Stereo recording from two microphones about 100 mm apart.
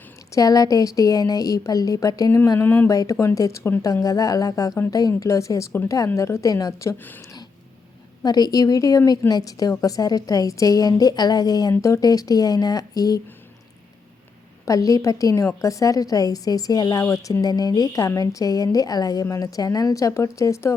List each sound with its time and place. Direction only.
0.3 s a woman's voice: 35° left (ahead or behind)
2.6 s a woman's voice: 20° left (ahead or behind)
2.9 s a woman's voice: 35° left (ahead or behind)
4.0 s a woman's voice: 35° left (ahead or behind)
8.2 s a woman's voice: 40° left (ahead or behind)
14.6 s a woman's voice: 35° left (ahead or behind)